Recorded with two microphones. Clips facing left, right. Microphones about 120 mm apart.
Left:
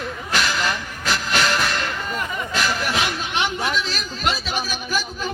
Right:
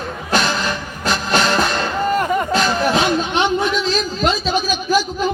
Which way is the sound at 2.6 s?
25° right (ahead or behind).